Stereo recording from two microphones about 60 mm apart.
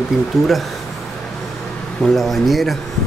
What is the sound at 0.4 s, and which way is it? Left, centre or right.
Speech, centre.